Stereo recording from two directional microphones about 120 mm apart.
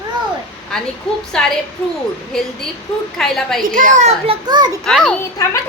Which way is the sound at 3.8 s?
85° right.